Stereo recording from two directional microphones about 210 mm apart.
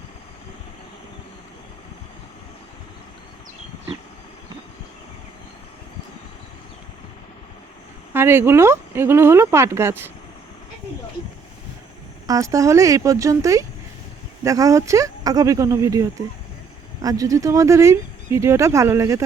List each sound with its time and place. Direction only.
8.1 s speech: 10° right (ahead or behind)
12.3 s speech: 15° right (ahead or behind)